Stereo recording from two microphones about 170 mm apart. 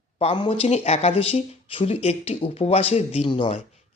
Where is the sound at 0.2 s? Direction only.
35° left (ahead or behind).